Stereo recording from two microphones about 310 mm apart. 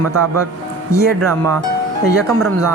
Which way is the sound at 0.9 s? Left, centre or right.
Centre.